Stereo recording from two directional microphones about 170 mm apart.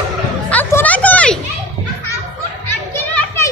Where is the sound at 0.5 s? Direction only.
10° left (ahead or behind).